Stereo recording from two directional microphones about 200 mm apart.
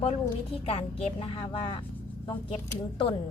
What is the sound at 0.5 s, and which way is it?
A woman's voice, 30° left (ahead or behind).